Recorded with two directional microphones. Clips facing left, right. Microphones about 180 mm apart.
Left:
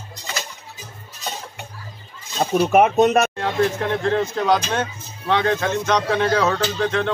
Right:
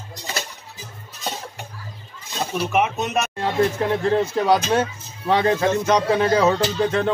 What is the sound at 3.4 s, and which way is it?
Speech, 10° right (ahead or behind).